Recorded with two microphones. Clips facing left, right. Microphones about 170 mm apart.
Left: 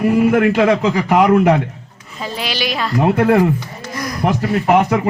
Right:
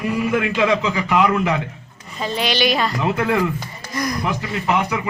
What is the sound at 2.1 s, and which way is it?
Speech, 5° left (ahead or behind).